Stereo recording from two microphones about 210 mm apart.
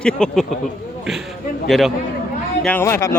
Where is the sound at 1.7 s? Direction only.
Centre (ahead or behind).